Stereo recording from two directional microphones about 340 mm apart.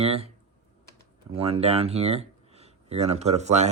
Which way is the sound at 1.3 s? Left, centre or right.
Centre.